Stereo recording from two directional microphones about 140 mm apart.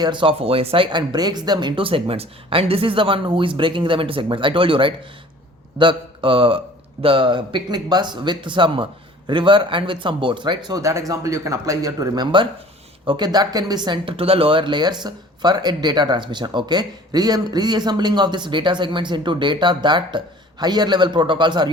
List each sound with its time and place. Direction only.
0.0 s speech: 35° right (ahead or behind)